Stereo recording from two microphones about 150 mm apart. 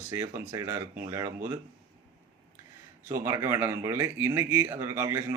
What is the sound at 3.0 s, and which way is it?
Speech, 20° right (ahead or behind).